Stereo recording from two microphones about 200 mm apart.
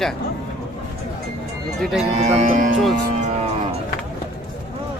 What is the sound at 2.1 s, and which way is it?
Speech, 35° right (ahead or behind).